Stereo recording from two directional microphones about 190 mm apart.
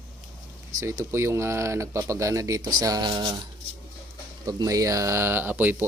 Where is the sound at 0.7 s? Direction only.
15° right (ahead or behind).